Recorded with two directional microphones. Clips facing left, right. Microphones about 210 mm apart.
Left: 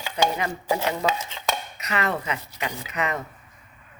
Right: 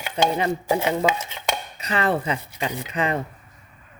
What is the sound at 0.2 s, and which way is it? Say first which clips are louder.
Speech: right 2 dB; 30° right (ahead or behind).